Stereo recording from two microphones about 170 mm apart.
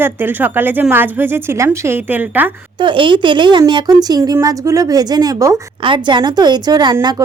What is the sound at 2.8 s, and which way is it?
A woman's voice, 30° right (ahead or behind).